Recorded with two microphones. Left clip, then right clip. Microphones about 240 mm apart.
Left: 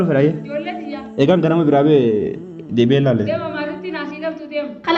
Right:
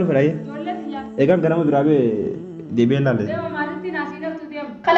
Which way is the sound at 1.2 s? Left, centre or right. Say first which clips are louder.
Left 2 dB; left.